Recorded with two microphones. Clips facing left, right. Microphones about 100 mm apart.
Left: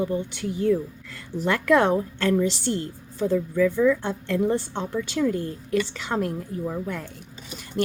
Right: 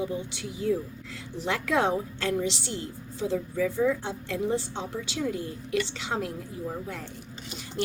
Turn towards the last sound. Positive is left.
turn(degrees=50)  # may be behind; listen again after turning